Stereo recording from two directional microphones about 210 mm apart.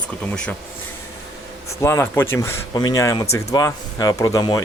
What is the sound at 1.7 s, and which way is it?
Speech, 10° left (ahead or behind).